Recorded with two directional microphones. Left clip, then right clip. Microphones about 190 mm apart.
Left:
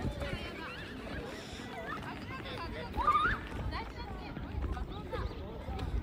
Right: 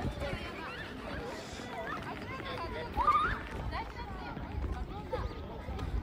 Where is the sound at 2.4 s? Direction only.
50° right (ahead or behind).